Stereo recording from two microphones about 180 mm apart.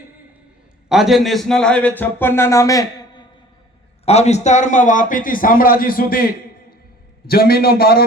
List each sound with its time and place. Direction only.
0.9 s a man's voice: centre (ahead or behind); by 3.2 s 20° left (ahead or behind)
4.0 s a man's voice: 35° left (ahead or behind); by 8.0 s 55° left (ahead or behind)